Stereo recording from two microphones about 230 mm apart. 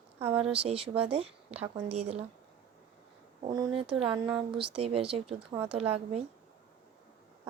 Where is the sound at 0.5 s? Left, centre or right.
Right.